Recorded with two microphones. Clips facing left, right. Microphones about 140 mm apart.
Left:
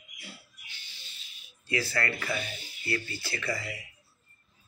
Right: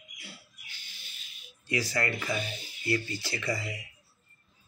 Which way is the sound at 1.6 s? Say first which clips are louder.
Even; 15° right (ahead or behind).